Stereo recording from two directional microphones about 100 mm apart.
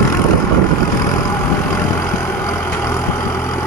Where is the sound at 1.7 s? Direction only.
30° left (ahead or behind).